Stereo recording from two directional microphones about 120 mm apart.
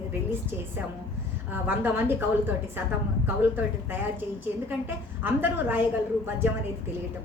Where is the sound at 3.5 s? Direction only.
15° right (ahead or behind).